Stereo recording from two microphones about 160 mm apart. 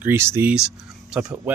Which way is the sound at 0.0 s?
15° right (ahead or behind).